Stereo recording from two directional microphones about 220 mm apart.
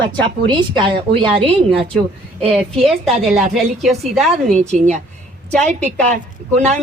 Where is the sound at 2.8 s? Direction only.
Centre (ahead or behind).